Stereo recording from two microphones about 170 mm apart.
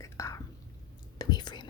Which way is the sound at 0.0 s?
20° left (ahead or behind).